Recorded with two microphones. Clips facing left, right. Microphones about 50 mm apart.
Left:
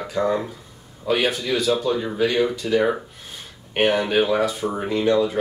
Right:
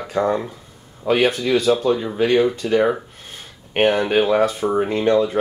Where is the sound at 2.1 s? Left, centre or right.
Right.